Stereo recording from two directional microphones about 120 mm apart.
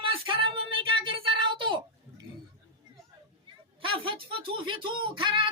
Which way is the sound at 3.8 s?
45° right (ahead or behind).